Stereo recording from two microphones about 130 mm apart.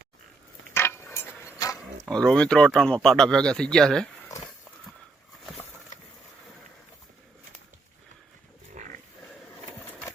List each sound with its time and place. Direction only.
0.7 s a sound: 20° left (ahead or behind)
2.0 s speech: 5° left (ahead or behind)
8.7 s pig: 75° right (ahead or behind)